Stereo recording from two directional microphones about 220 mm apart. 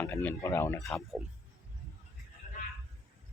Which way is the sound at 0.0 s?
10° left (ahead or behind).